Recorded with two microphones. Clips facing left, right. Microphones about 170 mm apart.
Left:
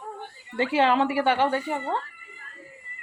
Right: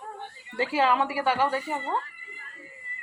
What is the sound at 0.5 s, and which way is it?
Speech, 25° left (ahead or behind).